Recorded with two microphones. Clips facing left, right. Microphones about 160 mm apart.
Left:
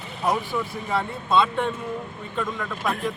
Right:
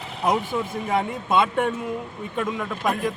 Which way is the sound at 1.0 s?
15° right (ahead or behind).